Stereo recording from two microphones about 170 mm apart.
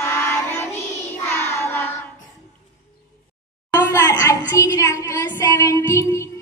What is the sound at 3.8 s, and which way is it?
Child singing, 20° left (ahead or behind).